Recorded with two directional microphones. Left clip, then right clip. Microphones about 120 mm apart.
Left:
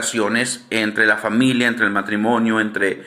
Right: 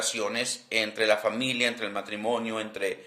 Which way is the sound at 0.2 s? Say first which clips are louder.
Left 10 dB; 25° right (ahead or behind).